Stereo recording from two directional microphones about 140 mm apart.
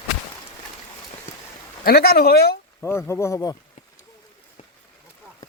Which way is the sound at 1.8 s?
90° left.